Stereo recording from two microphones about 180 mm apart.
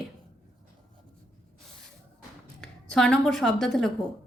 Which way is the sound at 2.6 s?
5° left (ahead or behind).